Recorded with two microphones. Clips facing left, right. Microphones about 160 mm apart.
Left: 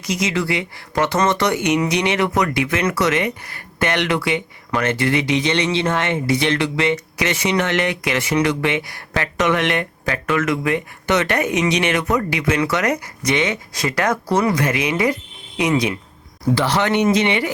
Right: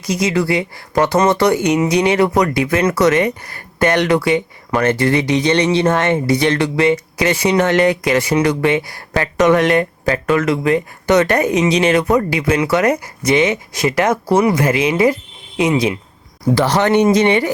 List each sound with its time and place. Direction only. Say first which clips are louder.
0.0 s speech: right 4 dB; 35° right (ahead or behind)
16.6 s speech: right 5 dB; 40° right (ahead or behind)